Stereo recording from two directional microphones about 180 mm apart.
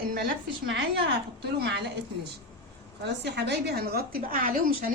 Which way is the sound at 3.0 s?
70° right (ahead or behind).